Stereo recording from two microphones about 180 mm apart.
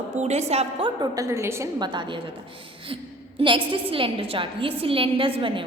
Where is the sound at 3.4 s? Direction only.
25° right (ahead or behind).